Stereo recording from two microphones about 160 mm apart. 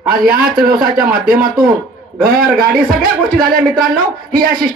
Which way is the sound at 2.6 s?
65° right (ahead or behind).